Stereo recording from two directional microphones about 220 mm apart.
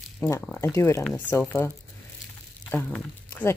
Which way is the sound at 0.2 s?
10° left (ahead or behind).